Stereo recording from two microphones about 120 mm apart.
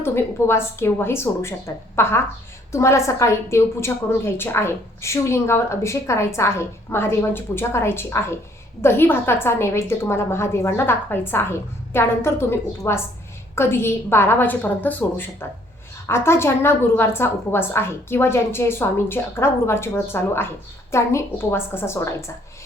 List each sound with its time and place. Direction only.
0.0 s a woman's voice: 20° left (ahead or behind)